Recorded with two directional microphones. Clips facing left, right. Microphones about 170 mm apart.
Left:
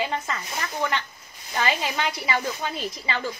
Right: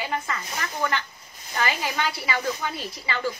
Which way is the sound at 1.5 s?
20° left (ahead or behind).